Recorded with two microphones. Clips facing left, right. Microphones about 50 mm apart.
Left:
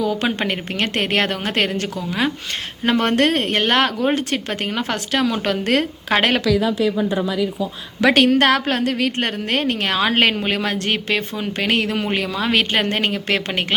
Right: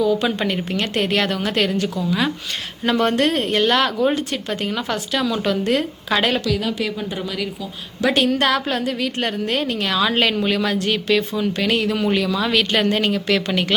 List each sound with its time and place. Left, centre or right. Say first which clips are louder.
0.0 s a sound: right 3 dB; left
0.3 s a woman's voice: even; left
8.0 s a woman's voice: left 4 dB; left